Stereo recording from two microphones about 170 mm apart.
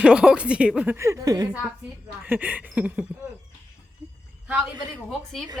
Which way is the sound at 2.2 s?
10° right (ahead or behind).